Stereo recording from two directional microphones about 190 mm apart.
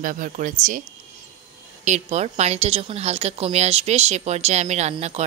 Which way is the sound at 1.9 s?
35° right (ahead or behind).